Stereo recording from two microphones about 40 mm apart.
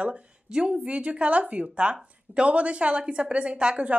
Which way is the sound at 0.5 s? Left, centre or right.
Centre.